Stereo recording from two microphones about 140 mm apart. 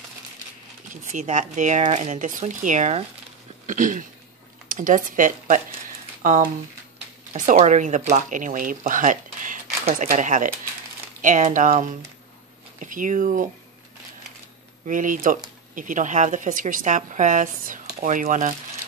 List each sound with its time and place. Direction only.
1.1 s speech: 60° right (ahead or behind)
3.6 s speech: 65° right (ahead or behind)
7.5 s speech: 55° right (ahead or behind)
14.9 s speech: 70° right (ahead or behind)